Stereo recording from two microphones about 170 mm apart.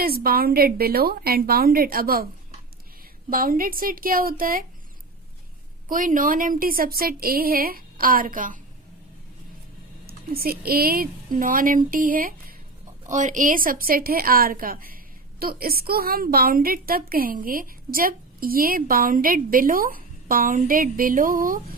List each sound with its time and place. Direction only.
0.0 s a woman's voice: 60° right (ahead or behind)
3.2 s a woman's voice: 55° right (ahead or behind)
5.9 s a woman's voice: 50° right (ahead or behind)
10.1 s a woman's voice: 60° right (ahead or behind)